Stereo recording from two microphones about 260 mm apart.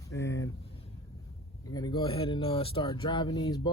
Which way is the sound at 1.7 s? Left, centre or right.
Centre.